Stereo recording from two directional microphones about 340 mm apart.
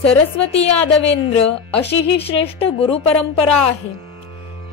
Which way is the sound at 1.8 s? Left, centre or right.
Left.